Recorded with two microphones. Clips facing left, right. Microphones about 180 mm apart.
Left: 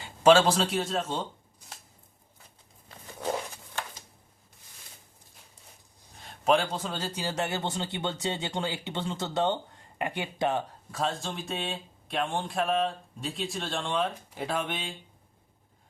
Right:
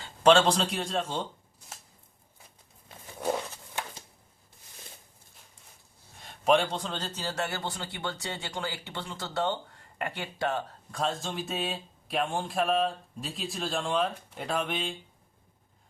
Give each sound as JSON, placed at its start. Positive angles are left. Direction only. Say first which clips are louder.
{"t": 0.0, "sound": "speech", "louder": "left 1 dB", "side_deg": 5}
{"t": 6.1, "sound": "a man's voice", "louder": "right 1 dB", "side_deg": 0}
{"t": 10.9, "sound": "speech", "louder": "even", "side_deg": 0}